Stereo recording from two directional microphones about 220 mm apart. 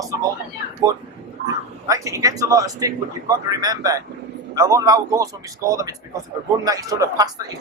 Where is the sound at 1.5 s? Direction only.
15° right (ahead or behind).